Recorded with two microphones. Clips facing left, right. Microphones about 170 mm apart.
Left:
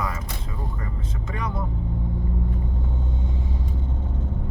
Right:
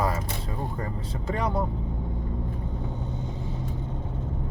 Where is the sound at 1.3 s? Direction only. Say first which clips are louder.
Right 3 dB; 35° right (ahead or behind).